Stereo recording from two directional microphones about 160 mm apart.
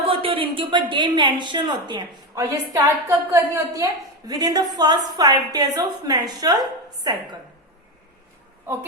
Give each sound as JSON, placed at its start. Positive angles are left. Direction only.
{"t": 0.1, "sound": "a woman's voice", "side_deg": -35}
{"t": 8.6, "sound": "a woman's voice", "side_deg": -15}